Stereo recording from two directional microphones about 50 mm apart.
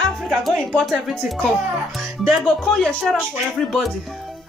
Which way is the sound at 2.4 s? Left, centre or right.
Left.